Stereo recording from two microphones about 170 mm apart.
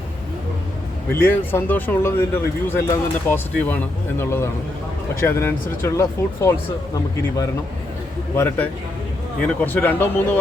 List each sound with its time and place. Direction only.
1.1 s speech: 15° left (ahead or behind)
8.4 s speech: 10° left (ahead or behind)